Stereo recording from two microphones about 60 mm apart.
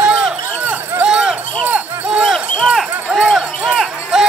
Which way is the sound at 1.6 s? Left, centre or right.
Right.